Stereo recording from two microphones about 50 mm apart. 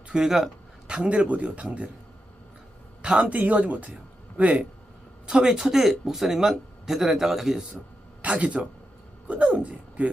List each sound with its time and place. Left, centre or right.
0.1 s speech: centre
0.9 s speech: right
3.0 s speech: right
5.2 s speech: centre
8.2 s speech: right